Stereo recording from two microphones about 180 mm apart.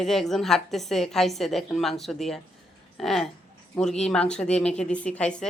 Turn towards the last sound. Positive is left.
turn(degrees=5)  # may be behind; listen again after turning